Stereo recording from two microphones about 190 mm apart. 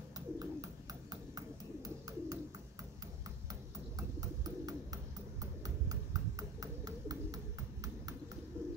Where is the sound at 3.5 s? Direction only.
20° right (ahead or behind).